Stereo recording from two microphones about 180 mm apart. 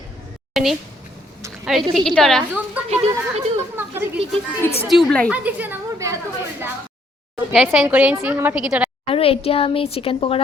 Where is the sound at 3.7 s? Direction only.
10° right (ahead or behind).